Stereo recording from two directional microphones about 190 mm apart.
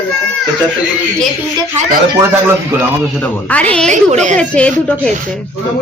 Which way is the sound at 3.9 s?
40° right (ahead or behind).